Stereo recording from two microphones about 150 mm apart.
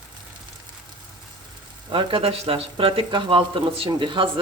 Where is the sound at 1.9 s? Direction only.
35° right (ahead or behind).